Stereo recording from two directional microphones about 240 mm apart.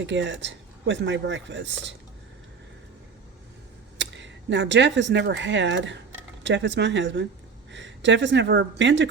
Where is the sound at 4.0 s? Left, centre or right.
Right.